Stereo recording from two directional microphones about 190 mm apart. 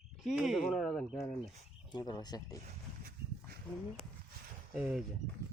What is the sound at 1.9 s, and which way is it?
Speech, 20° left (ahead or behind).